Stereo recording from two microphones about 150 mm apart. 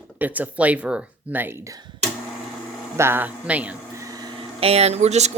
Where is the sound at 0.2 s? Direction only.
10° right (ahead or behind).